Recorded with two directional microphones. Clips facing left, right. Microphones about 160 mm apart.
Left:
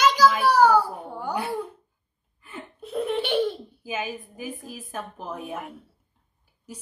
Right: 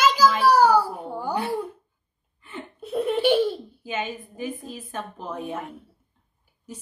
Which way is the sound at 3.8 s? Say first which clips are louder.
Right 1 dB; 5° left (ahead or behind).